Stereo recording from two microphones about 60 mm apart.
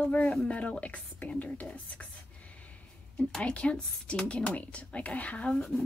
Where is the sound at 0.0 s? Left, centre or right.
Left.